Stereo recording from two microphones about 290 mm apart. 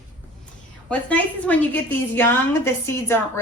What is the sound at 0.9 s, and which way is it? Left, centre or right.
A woman's voice, centre.